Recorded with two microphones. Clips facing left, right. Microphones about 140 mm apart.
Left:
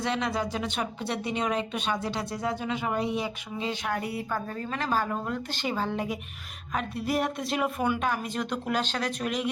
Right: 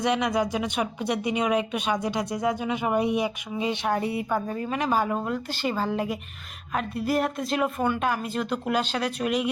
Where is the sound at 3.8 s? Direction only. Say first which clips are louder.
Right 5 dB; 25° right (ahead or behind).